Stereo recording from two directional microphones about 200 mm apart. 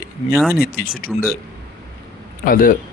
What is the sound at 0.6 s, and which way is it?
Speech, 50° left (ahead or behind).